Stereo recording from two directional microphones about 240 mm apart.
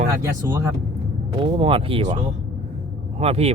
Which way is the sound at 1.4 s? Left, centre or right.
Right.